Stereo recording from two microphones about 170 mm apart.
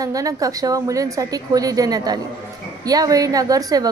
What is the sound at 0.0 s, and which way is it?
A woman's voice, 20° right (ahead or behind).